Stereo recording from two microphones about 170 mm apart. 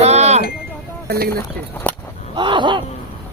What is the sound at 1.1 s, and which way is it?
Speech, 70° right (ahead or behind).